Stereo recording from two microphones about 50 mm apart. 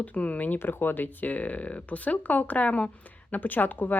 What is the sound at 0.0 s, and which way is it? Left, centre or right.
Speech, left.